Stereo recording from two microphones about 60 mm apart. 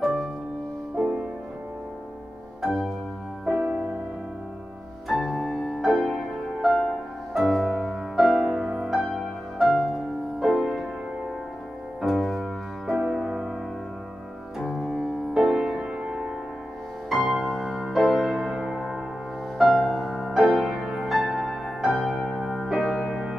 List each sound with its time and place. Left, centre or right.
1.0 s music: centre
2.6 s music: centre
3.4 s music: centre
5.0 s music: centre
12.0 s keyboard: centre
12.9 s music: centre
14.6 s music: centre
15.3 s music: centre
17.1 s music: centre